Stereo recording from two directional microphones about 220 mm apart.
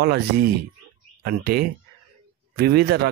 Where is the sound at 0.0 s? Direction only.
45° right (ahead or behind).